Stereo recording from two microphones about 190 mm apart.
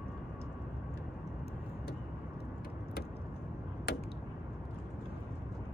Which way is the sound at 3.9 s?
55° left (ahead or behind).